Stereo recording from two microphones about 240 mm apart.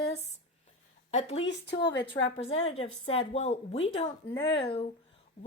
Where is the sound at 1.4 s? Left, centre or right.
Left.